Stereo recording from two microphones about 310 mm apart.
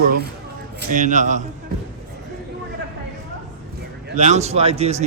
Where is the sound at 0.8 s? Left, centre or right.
Right.